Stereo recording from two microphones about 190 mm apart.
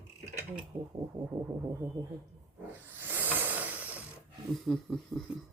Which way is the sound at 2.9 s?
10° right (ahead or behind).